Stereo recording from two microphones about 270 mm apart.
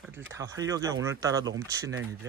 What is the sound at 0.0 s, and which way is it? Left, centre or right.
Speech, centre.